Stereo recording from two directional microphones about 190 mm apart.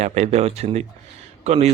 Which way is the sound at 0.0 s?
35° right (ahead or behind).